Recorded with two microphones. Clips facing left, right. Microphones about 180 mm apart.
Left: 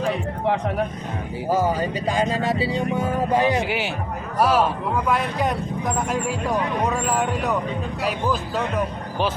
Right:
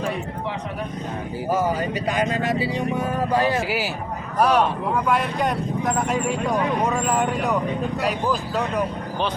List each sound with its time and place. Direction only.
1.5 s speech: 30° left (ahead or behind)
3.6 s speech: centre (ahead or behind)